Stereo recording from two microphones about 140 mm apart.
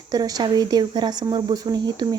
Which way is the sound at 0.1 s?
30° right (ahead or behind).